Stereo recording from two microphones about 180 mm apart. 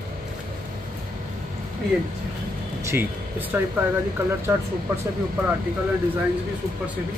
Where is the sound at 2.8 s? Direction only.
15° right (ahead or behind).